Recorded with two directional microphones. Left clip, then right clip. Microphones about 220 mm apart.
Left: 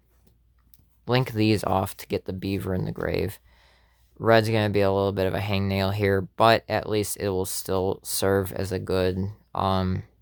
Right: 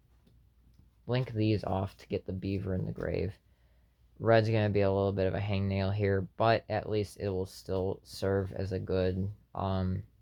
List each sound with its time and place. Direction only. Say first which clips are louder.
1.0 s speech: left 9 dB; 30° left (ahead or behind)